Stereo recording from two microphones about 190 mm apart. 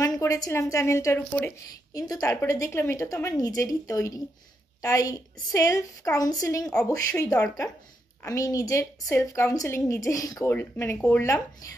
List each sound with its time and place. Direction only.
0.0 s a woman's voice: 15° left (ahead or behind)